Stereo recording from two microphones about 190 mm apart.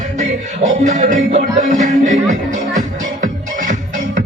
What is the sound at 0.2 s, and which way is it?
Music, 40° right (ahead or behind).